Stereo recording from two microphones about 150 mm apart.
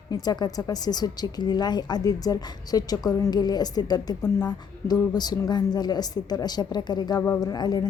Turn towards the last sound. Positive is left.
turn(degrees=25)  # may be behind; listen again after turning